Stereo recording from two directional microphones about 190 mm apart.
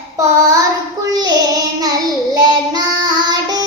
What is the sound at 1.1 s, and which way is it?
Child singing, 20° right (ahead or behind).